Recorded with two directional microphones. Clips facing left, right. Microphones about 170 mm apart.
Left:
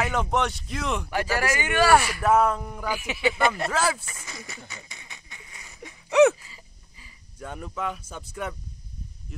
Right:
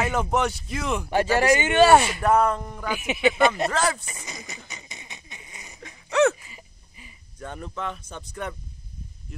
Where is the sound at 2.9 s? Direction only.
20° right (ahead or behind).